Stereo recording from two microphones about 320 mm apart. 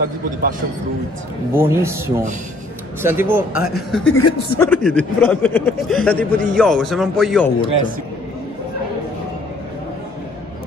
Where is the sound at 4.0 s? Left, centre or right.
Left.